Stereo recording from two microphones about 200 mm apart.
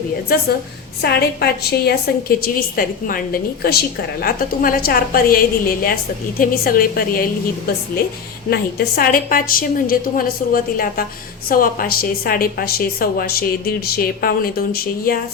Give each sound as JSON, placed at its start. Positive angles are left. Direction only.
{"t": 1.0, "sound": "a woman's voice", "side_deg": 50}
{"t": 8.4, "sound": "a woman's voice", "side_deg": 50}